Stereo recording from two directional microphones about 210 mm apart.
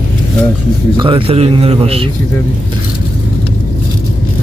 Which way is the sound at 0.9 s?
25° right (ahead or behind).